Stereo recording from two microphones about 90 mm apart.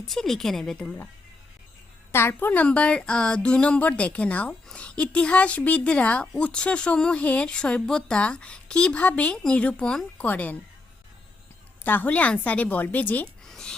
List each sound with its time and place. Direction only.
0.1 s a woman's voice: 5° left (ahead or behind)
2.1 s a woman's voice: 25° left (ahead or behind)
11.8 s a woman's voice: 20° left (ahead or behind)
13.4 s a sound: 5° left (ahead or behind)